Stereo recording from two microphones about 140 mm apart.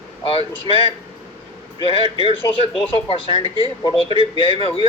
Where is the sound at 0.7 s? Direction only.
40° left (ahead or behind).